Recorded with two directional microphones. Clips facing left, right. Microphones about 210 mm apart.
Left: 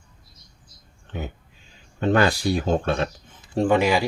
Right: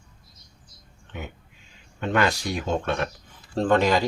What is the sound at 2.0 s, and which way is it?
Speech, 35° left (ahead or behind).